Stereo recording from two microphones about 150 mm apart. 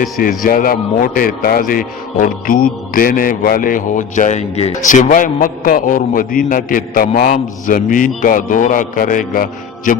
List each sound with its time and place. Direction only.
0.0 s speech: 65° left (ahead or behind)